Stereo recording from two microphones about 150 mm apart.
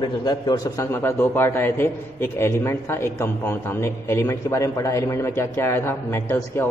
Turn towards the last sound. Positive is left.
turn(degrees=15)  # may be behind; listen again after turning